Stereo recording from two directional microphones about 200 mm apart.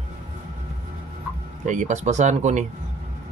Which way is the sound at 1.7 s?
35° right (ahead or behind).